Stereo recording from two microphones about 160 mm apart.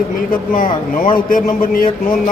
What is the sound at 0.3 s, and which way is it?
A man's voice, 65° left (ahead or behind).